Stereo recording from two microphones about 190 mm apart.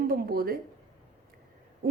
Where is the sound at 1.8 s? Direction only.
50° right (ahead or behind).